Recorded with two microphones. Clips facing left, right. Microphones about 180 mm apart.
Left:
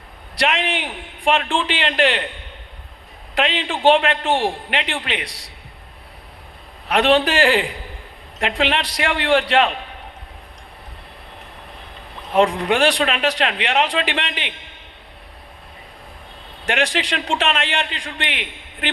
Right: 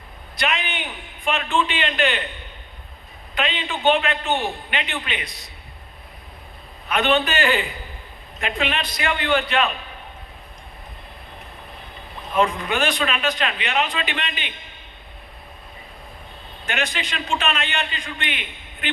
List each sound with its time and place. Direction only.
0.3 s a man's voice: 90° left
3.3 s a man's voice: 90° left
6.8 s a man's voice: 90° left
12.3 s a man's voice: 85° left
16.6 s a man's voice: 90° left